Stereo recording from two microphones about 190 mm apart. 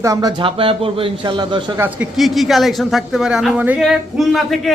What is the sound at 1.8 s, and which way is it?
Speech, 10° right (ahead or behind).